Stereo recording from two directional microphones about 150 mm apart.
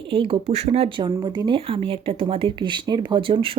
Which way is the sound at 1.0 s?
30° right (ahead or behind).